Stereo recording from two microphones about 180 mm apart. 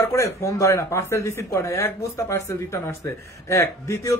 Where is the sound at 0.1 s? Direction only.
15° left (ahead or behind).